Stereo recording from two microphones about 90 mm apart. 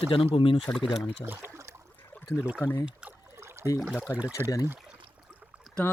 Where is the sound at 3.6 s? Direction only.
35° right (ahead or behind).